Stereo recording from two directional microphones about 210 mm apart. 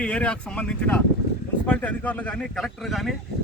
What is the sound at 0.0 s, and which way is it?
Speech, 5° left (ahead or behind).